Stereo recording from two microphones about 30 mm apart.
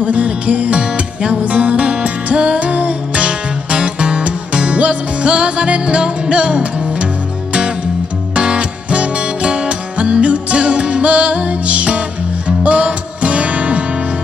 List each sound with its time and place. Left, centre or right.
0.0 s music: right
0.7 s music: right
1.4 s music: right
8.4 s music: right